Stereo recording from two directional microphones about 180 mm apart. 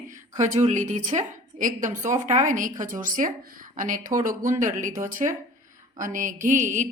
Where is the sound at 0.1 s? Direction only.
40° right (ahead or behind).